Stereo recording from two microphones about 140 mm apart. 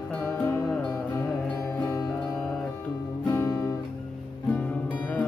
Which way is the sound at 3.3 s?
25° left (ahead or behind).